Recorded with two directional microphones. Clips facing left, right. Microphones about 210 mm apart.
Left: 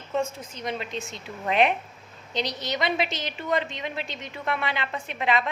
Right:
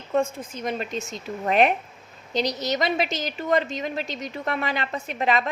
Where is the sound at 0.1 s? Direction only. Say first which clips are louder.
Right 4 dB; 50° right (ahead or behind).